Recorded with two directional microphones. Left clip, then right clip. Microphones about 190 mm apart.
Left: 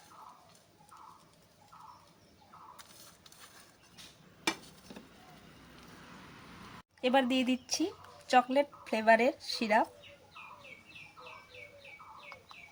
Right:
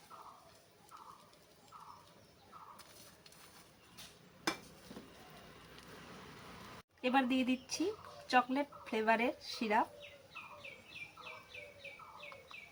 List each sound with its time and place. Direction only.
7.0 s speech: 45° left (ahead or behind)